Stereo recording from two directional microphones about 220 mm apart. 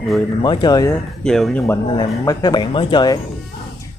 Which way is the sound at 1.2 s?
5° left (ahead or behind).